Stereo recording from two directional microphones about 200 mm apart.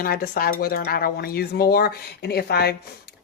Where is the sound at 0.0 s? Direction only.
50° left (ahead or behind).